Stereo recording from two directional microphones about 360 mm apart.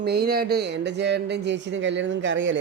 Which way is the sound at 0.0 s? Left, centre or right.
Right.